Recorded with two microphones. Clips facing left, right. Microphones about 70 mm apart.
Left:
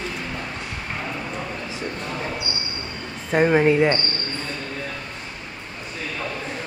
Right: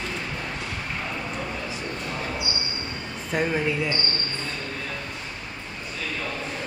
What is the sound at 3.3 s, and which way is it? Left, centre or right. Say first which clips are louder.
Speech: left 8 dB; left.